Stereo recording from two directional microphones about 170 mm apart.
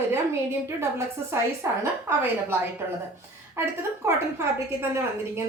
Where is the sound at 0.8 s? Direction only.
15° right (ahead or behind).